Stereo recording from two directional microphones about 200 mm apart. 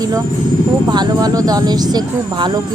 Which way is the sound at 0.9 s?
20° right (ahead or behind).